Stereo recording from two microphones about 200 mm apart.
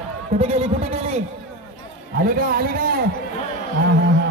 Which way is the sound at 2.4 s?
45° right (ahead or behind).